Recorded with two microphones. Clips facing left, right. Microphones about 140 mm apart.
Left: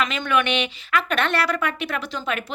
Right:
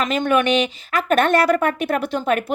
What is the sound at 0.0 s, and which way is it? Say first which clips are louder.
A woman's voice: right 4 dB; 45° right (ahead or behind).